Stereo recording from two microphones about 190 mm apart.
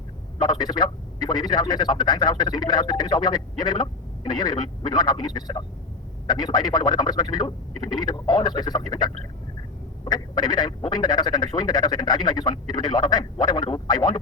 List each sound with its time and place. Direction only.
0.4 s a man's voice: 20° left (ahead or behind)